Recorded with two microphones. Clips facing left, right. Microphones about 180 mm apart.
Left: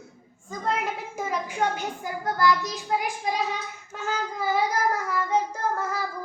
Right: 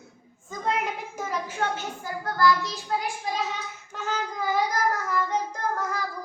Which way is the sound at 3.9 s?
5° left (ahead or behind).